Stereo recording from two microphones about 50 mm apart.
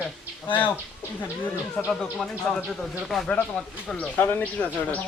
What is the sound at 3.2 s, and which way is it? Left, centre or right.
Speech, left.